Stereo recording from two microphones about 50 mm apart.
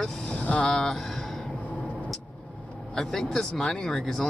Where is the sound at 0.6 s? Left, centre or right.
Centre.